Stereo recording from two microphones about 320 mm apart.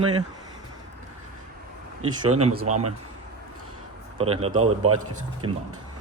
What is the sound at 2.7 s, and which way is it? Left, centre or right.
Speech, right.